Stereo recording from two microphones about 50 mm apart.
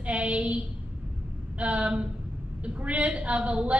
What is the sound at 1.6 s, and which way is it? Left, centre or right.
A woman's voice, right.